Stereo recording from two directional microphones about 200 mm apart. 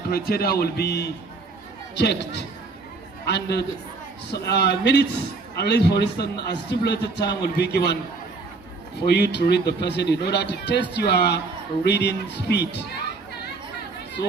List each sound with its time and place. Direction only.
0.1 s a man's voice: 50° left (ahead or behind)
9.0 s a man's voice: 55° left (ahead or behind)